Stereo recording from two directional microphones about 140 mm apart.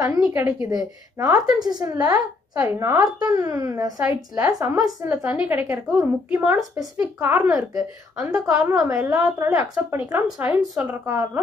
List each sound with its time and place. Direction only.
0.3 s a woman's voice: 15° right (ahead or behind)
0.7 s speech: 25° right (ahead or behind)
5.1 s a woman's voice: 10° right (ahead or behind)
8.6 s a woman's voice: 20° right (ahead or behind)
10.2 s speech: 5° right (ahead or behind)
10.9 s speech: 20° right (ahead or behind)